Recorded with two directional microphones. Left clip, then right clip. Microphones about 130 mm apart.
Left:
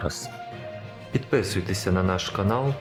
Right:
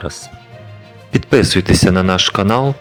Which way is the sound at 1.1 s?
50° right (ahead or behind).